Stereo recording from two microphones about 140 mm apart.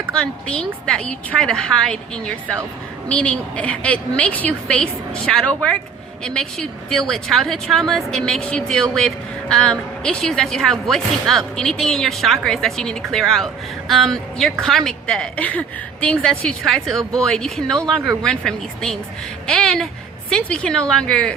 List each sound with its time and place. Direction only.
0.1 s a woman's voice: 5° left (ahead or behind)